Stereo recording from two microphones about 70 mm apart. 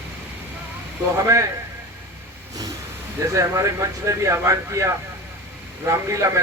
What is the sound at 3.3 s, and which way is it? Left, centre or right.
Speech, right.